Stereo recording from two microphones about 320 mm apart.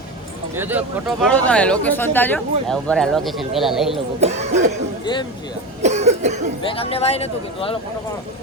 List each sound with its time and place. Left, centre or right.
0.5 s speech: centre
4.2 s speech: right
5.8 s speech: right
6.6 s speech: centre